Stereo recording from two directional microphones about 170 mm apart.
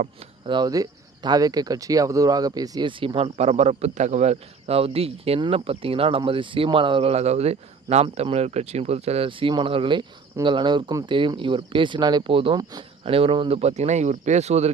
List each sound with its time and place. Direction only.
0.4 s speech: 25° right (ahead or behind)